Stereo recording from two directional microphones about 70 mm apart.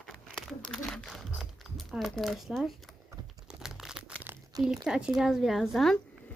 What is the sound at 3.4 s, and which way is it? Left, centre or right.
Crumpling, centre.